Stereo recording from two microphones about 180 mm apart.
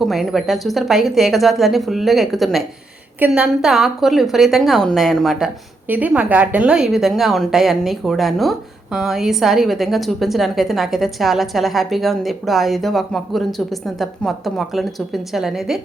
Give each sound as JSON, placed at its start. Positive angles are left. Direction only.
{"t": 0.0, "sound": "a woman's voice", "side_deg": 0}